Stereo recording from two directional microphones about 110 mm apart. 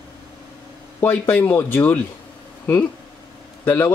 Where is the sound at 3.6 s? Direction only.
20° left (ahead or behind).